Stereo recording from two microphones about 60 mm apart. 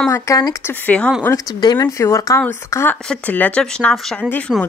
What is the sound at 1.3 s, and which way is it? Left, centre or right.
Speech, left.